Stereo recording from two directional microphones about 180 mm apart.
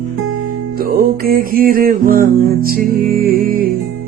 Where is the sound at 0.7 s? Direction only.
55° right (ahead or behind).